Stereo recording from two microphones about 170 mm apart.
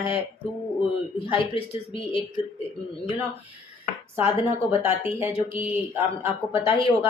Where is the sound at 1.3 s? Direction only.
35° left (ahead or behind).